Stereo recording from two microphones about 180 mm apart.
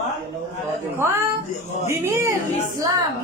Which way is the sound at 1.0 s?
15° right (ahead or behind).